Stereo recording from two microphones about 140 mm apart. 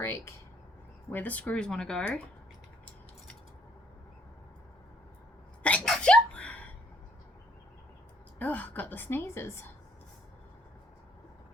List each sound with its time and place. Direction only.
0.0 s speech: 20° left (ahead or behind)
5.6 s sneeze: 5° left (ahead or behind)
8.4 s a woman's voice: 10° left (ahead or behind)